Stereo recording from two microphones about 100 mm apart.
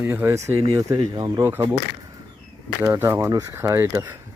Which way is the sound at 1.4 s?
25° right (ahead or behind).